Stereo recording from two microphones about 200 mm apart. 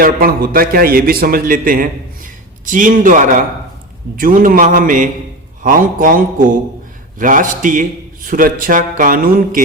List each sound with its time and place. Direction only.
0.0 s a man's voice: 45° right (ahead or behind)